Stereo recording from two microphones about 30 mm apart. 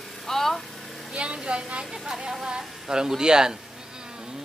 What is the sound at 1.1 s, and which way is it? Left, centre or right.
Speech, right.